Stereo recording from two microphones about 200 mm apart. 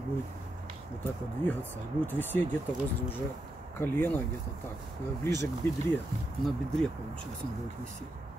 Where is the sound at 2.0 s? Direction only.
10° left (ahead or behind).